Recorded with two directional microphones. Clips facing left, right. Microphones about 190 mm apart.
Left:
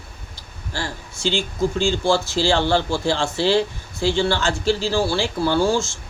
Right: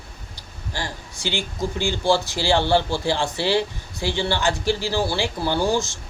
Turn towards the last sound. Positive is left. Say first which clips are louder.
# left 3 dB
turn(degrees=-15)  # may be behind; listen again after turning